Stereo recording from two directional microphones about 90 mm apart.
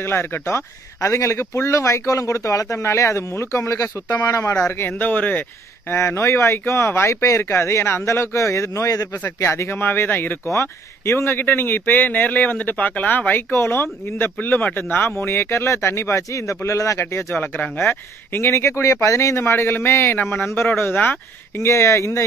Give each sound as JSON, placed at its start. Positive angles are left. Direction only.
{"t": 0.0, "sound": "speech", "side_deg": 25}
{"t": 4.6, "sound": "speech", "side_deg": 25}
{"t": 9.2, "sound": "speech", "side_deg": 25}
{"t": 21.6, "sound": "speech", "side_deg": 30}